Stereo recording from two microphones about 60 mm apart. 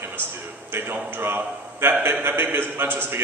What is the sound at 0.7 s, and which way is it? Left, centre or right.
A man's voice, right.